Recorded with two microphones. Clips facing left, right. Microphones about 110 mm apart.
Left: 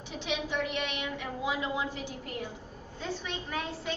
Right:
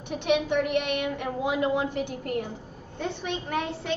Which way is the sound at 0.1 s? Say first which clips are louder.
Right 9 dB; 60° right (ahead or behind).